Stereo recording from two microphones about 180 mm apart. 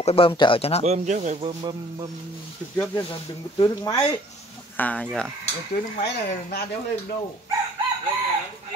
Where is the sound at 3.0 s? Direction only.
25° left (ahead or behind).